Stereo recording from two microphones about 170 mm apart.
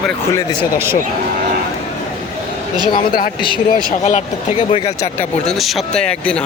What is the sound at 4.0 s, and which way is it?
Speech, 40° left (ahead or behind).